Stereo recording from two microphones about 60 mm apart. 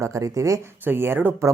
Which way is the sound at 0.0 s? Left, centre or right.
Right.